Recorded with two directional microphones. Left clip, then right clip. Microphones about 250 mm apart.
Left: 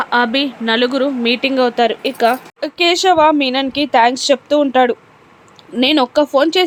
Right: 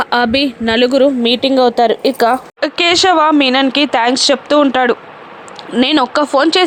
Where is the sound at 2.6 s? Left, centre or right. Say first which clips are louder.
Right 3 dB; centre.